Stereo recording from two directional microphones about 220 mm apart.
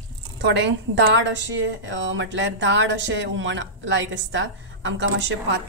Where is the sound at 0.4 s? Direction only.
55° right (ahead or behind).